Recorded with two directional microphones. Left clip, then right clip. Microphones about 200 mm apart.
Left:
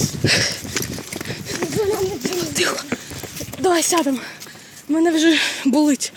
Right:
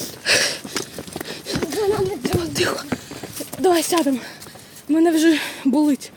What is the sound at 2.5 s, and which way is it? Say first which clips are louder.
Speech: left 3 dB; 20° right (ahead or behind).